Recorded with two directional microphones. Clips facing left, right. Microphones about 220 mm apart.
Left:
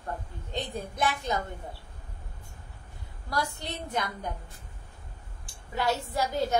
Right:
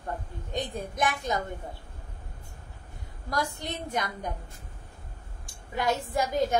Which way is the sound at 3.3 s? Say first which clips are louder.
Right 1 dB; 15° right (ahead or behind).